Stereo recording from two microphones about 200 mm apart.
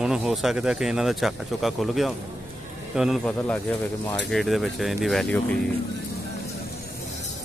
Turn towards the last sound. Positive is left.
turn(degrees=5)  # may be behind; listen again after turning